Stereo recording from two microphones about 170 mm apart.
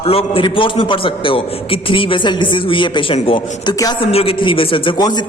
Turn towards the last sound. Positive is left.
turn(degrees=25)  # may be behind; listen again after turning